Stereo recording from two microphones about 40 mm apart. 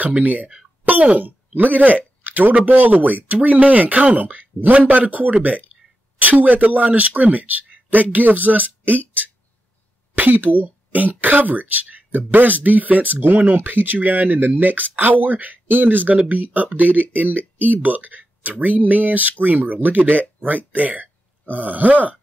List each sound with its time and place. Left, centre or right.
0.0 s speech: right
13.6 s speech: right
13.9 s speech: right